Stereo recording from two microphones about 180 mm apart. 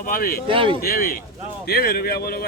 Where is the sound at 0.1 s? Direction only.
55° left (ahead or behind).